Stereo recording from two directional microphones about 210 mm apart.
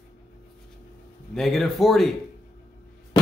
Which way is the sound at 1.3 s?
Centre (ahead or behind).